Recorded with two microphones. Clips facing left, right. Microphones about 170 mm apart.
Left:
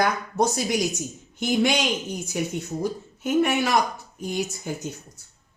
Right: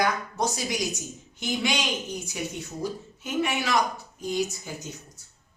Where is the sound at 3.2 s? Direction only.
50° left (ahead or behind).